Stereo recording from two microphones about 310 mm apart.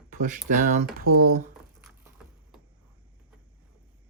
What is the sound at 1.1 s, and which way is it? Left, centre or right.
Speech, right.